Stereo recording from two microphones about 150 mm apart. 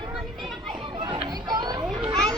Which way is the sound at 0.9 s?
35° right (ahead or behind).